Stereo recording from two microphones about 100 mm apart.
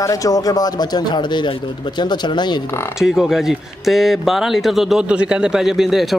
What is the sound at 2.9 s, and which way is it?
Speech, 5° right (ahead or behind).